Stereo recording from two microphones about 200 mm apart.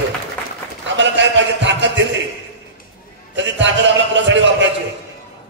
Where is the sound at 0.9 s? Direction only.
65° right (ahead or behind).